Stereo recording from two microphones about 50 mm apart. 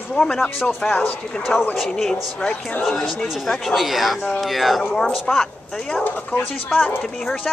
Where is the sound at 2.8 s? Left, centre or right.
Centre.